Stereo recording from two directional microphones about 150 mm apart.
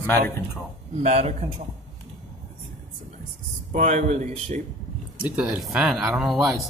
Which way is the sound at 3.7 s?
50° right (ahead or behind).